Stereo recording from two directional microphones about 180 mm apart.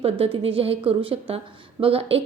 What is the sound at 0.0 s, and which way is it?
A woman's voice, 30° right (ahead or behind).